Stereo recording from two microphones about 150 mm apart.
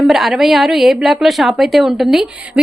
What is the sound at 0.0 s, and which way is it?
A woman's voice, centre (ahead or behind).